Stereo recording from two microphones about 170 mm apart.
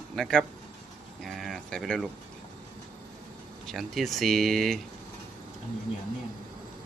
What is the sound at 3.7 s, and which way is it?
Speech, centre (ahead or behind).